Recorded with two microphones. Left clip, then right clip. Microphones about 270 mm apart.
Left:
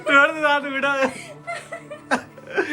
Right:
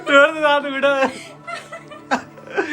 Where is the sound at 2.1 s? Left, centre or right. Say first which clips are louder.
Right 2 dB; centre.